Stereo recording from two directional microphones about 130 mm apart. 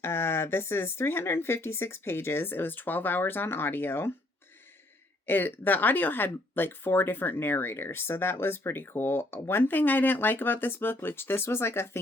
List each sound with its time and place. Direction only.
0.0 s speech: 20° left (ahead or behind)
5.2 s speech: 15° left (ahead or behind)